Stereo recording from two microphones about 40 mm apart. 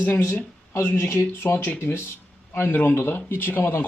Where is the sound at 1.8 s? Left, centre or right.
Left.